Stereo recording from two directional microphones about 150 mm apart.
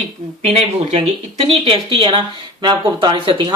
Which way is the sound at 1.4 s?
35° right (ahead or behind).